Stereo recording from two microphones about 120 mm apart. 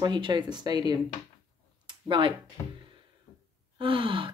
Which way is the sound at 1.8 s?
45° right (ahead or behind).